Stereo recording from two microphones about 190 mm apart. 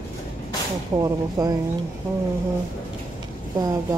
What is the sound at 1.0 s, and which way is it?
Speech, 20° right (ahead or behind).